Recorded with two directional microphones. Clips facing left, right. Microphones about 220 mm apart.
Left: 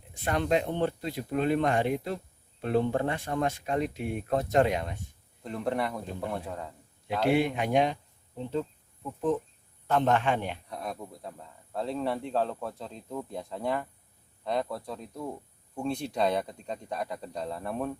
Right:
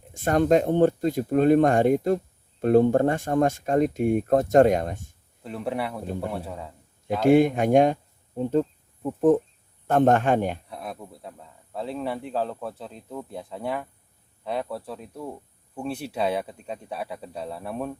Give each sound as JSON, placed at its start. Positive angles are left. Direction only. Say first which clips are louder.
{"t": 0.1, "sound": "speech", "louder": "right 7 dB", "side_deg": -45}
{"t": 5.4, "sound": "speech", "louder": "right 1 dB", "side_deg": -5}
{"t": 7.3, "sound": "speech", "louder": "right 8 dB", "side_deg": -45}
{"t": 9.8, "sound": "speech", "louder": "right 6 dB", "side_deg": -50}
{"t": 10.7, "sound": "speech", "louder": "right 1 dB", "side_deg": -5}